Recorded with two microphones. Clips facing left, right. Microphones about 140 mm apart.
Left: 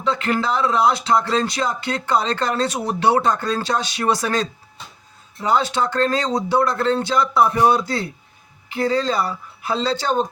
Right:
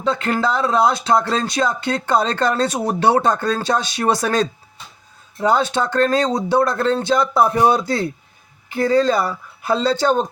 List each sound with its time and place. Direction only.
0.0 s speech: 40° right (ahead or behind)